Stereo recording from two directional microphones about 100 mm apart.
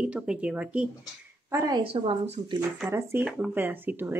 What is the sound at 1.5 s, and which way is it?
Speech, 30° right (ahead or behind).